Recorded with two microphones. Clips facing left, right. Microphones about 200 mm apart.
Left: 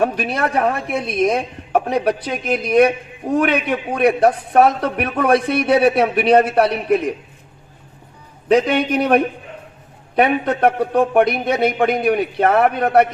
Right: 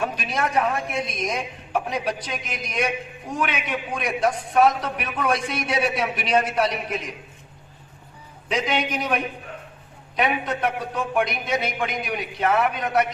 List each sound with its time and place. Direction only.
0.0 s speech: 60° left (ahead or behind)
8.4 s speech: 60° left (ahead or behind)